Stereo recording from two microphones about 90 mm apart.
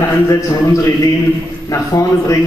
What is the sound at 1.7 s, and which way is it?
Speech, 35° left (ahead or behind).